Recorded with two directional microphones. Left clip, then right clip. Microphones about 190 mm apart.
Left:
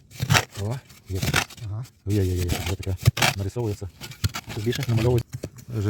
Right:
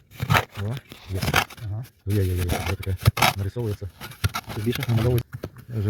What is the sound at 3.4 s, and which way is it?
Speech, 55° left (ahead or behind).